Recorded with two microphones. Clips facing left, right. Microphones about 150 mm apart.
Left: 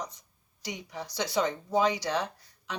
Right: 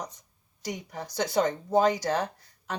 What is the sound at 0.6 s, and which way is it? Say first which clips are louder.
Speech: right 3 dB; 50° right (ahead or behind).